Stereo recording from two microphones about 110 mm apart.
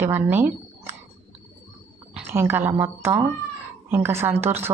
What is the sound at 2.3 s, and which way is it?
A woman's voice, 20° right (ahead or behind).